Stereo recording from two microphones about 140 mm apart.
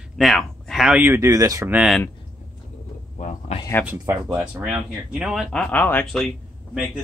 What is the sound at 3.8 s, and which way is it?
Speech, 15° right (ahead or behind).